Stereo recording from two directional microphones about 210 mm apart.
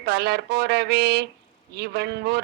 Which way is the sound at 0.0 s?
50° right (ahead or behind).